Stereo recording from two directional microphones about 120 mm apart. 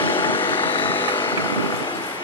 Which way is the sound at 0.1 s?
45° left (ahead or behind).